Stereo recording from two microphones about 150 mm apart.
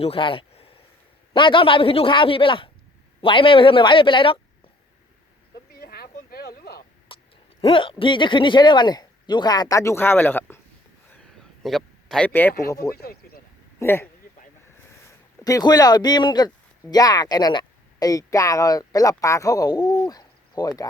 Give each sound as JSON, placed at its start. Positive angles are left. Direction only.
{"t": 0.0, "sound": "speech", "side_deg": 35}
{"t": 5.8, "sound": "a sound", "side_deg": 90}
{"t": 7.1, "sound": "clicking", "side_deg": 35}
{"t": 7.6, "sound": "speech", "side_deg": 35}
{"t": 11.6, "sound": "speech", "side_deg": 0}
{"t": 13.0, "sound": "a sound", "side_deg": 90}
{"t": 13.7, "sound": "speech", "side_deg": 15}
{"t": 15.4, "sound": "speech", "side_deg": 25}
{"t": 20.1, "sound": "a sound", "side_deg": 25}